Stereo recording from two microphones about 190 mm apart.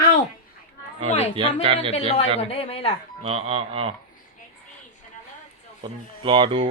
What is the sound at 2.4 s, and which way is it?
Speech, 30° left (ahead or behind).